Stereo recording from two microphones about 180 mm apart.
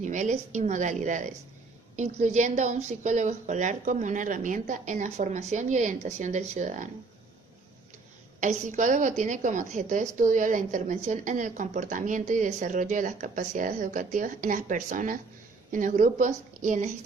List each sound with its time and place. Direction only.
0.0 s a woman's voice: 40° right (ahead or behind)
8.4 s a woman's voice: 45° right (ahead or behind)